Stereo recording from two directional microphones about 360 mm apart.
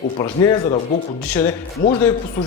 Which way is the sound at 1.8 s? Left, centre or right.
Left.